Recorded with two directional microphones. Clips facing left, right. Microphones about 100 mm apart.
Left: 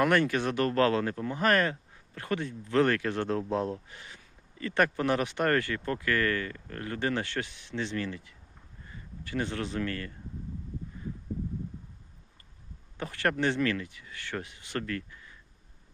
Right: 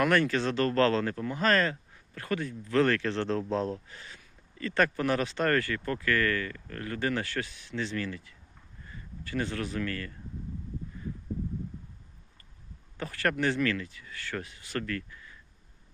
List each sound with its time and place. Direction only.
0.0 s a man's voice: 20° left (ahead or behind)
13.0 s speech: 20° left (ahead or behind)